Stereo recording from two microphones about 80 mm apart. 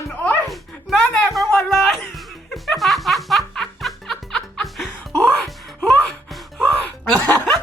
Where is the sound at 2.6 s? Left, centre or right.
Centre.